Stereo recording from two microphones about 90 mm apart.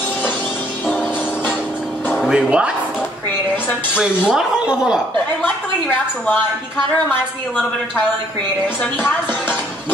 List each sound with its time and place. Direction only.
2.1 s speech: 10° right (ahead or behind)
4.3 s speech: 10° right (ahead or behind)
5.4 s a woman's voice: 15° left (ahead or behind)
9.0 s music: 20° left (ahead or behind)